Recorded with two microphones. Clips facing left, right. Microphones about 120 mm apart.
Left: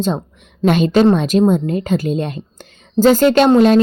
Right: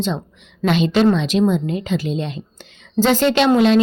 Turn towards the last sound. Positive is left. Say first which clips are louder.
# left 5 dB
turn(degrees=45)  # may be behind; listen again after turning